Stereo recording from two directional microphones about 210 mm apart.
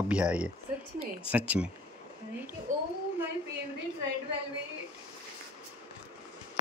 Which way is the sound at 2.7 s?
35° right (ahead or behind).